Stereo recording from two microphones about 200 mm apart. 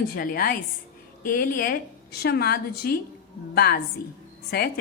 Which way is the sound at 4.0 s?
50° left (ahead or behind).